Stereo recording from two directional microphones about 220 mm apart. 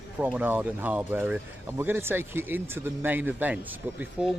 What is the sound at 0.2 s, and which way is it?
Speech, 5° right (ahead or behind).